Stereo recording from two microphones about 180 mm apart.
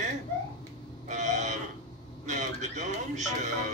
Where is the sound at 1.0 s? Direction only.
40° right (ahead or behind).